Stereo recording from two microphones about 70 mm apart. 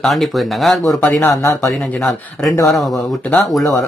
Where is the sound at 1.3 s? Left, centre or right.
Left.